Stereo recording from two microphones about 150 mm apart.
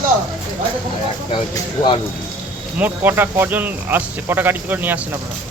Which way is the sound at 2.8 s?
10° right (ahead or behind).